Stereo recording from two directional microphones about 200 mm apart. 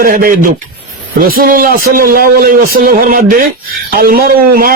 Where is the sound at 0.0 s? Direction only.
45° right (ahead or behind).